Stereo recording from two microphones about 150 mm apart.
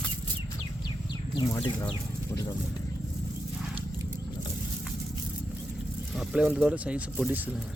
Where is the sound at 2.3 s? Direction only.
20° left (ahead or behind).